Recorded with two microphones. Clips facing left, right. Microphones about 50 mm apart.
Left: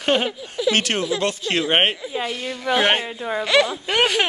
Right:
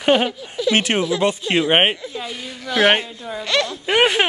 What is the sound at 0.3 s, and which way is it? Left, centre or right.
Speech, centre.